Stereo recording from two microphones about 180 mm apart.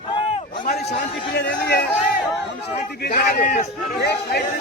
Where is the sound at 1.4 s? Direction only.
65° left (ahead or behind).